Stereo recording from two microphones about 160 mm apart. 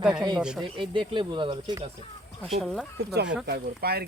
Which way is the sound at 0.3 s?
5° right (ahead or behind).